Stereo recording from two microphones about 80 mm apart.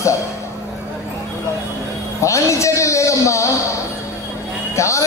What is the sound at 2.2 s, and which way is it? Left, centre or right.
Speech, left.